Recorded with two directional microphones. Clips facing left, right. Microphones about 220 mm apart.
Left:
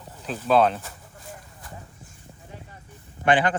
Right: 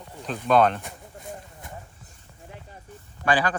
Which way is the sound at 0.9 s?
20° right (ahead or behind).